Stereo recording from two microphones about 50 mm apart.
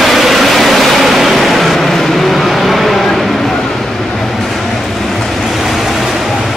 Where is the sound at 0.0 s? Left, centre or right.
Centre.